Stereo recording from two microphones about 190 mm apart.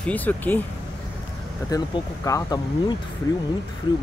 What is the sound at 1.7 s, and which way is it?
Speech, 20° left (ahead or behind).